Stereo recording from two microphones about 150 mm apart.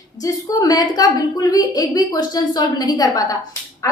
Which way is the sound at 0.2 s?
25° left (ahead or behind).